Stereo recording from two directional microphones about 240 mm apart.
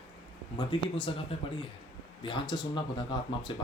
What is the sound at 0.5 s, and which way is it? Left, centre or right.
Speech, left.